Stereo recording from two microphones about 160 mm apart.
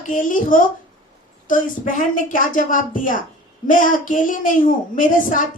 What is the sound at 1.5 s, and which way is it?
A woman's voice, 55° left (ahead or behind).